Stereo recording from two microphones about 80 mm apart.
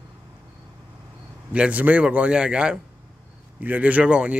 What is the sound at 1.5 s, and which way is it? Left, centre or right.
A man's voice, centre.